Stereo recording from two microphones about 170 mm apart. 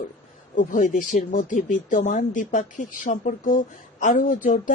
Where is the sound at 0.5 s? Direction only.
50° left (ahead or behind).